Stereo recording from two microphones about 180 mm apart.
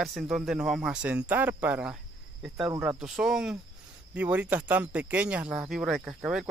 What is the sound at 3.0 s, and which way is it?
Speech, 5° right (ahead or behind).